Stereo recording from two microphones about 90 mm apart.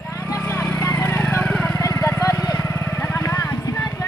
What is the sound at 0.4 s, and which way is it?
Vehicle, 20° left (ahead or behind).